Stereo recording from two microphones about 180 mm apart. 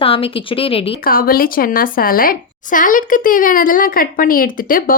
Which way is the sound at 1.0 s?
55° left (ahead or behind).